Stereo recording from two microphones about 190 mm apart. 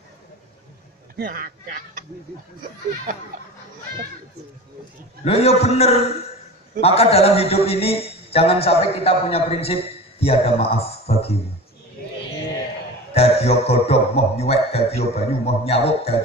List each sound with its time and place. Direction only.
1.1 s speech: 50° right (ahead or behind)
5.2 s a man's voice: 30° left (ahead or behind)
13.1 s a man's voice: 35° left (ahead or behind)